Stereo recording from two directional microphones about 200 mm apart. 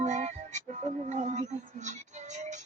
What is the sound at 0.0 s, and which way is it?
Music, 35° right (ahead or behind).